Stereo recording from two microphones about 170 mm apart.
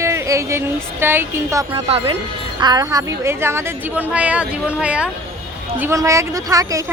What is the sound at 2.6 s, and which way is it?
Speech, 20° right (ahead or behind).